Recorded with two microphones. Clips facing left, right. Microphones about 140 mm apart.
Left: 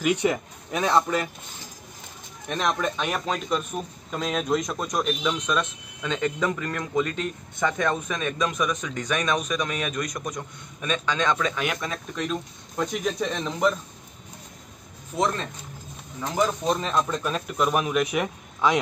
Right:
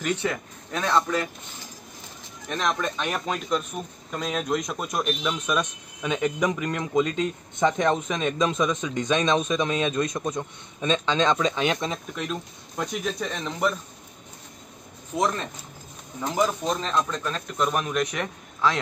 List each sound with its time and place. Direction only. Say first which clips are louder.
0.0 s speech: left 4 dB; 15° left (ahead or behind)
2.5 s speech: left 1 dB; 5° left (ahead or behind)
5.6 s speech: even; 15° right (ahead or behind)
12.2 s speech: left 2 dB; centre (ahead or behind)
16.2 s speech: even; 10° right (ahead or behind)
16.6 s speech: left 1 dB; 10° left (ahead or behind)